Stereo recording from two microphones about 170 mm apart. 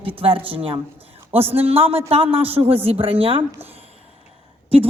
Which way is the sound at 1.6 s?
35° right (ahead or behind).